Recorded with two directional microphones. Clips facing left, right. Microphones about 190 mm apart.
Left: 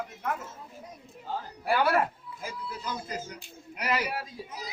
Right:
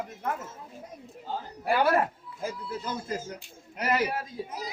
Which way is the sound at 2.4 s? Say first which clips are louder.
Right 4 dB; 45° right (ahead or behind).